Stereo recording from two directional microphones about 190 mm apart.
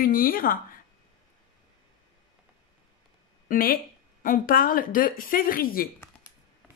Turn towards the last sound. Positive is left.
turn(degrees=50)  # may be behind; listen again after turning